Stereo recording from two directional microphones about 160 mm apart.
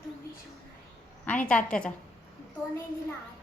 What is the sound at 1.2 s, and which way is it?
Speech, 10° left (ahead or behind).